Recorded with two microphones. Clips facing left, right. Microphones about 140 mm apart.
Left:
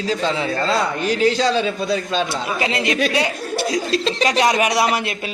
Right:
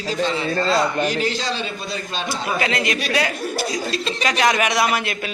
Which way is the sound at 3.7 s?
90° left.